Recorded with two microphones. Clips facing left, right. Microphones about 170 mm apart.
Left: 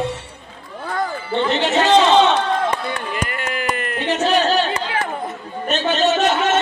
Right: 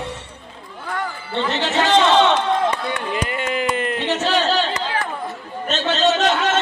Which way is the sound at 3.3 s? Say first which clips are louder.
Right 2 dB; 20° right (ahead or behind).